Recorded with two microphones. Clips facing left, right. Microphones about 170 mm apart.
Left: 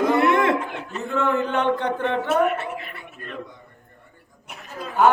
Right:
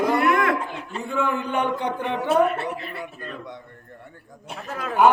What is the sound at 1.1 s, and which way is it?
A man's voice, 10° right (ahead or behind).